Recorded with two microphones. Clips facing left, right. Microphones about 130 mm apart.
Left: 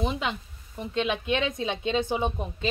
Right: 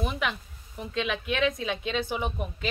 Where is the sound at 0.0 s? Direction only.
25° left (ahead or behind).